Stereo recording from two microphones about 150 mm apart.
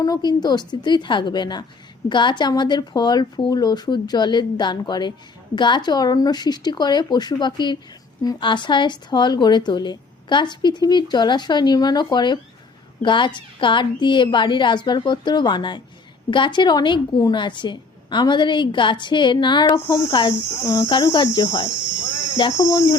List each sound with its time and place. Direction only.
0.0 s a woman's voice: 25° left (ahead or behind)